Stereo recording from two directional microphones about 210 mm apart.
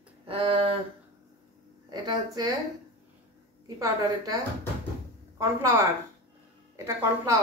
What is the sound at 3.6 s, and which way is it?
Speech, 15° right (ahead or behind).